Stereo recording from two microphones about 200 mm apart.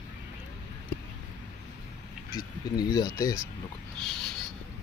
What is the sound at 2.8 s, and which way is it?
Speech, 20° left (ahead or behind).